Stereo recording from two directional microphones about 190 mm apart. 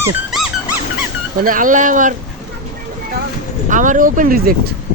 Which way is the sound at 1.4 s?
45° right (ahead or behind).